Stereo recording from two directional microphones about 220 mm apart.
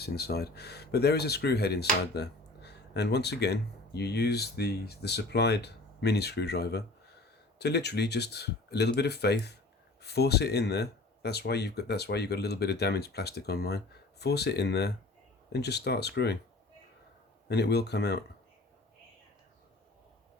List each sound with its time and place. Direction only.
0.0 s speech: 45° left (ahead or behind)
17.5 s speech: 50° left (ahead or behind)